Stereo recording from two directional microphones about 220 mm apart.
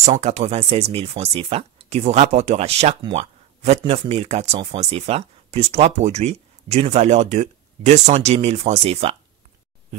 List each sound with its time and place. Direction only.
0.0 s speech: 30° right (ahead or behind)